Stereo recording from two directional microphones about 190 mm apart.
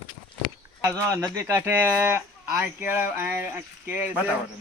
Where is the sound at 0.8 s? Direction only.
15° right (ahead or behind).